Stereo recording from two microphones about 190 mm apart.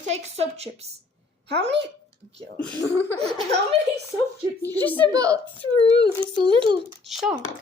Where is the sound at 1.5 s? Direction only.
65° right (ahead or behind).